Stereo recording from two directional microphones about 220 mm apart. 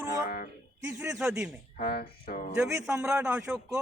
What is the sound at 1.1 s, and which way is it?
Speech, centre (ahead or behind).